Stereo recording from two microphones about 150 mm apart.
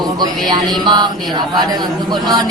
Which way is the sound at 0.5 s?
30° right (ahead or behind).